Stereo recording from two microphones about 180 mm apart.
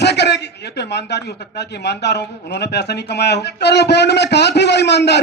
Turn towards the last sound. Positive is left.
turn(degrees=70)  # may be behind; listen again after turning